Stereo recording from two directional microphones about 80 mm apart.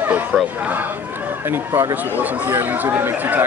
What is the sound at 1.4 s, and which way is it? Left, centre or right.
Speech, right.